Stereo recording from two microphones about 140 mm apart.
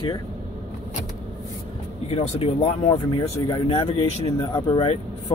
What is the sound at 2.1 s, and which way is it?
Speech, 45° left (ahead or behind).